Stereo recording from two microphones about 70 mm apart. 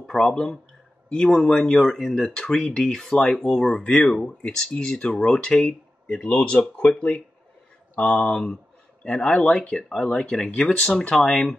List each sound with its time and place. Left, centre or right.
0.0 s speech: centre